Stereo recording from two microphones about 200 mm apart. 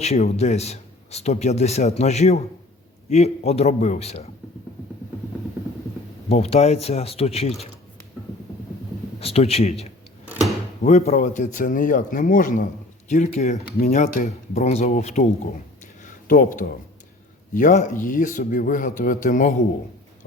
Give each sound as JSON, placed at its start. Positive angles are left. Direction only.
{"t": 0.0, "sound": "speech", "side_deg": 35}
{"t": 6.2, "sound": "speech", "side_deg": 30}
{"t": 9.2, "sound": "a man's voice", "side_deg": 30}
{"t": 16.0, "sound": "a sound", "side_deg": 45}
{"t": 17.5, "sound": "speech", "side_deg": 40}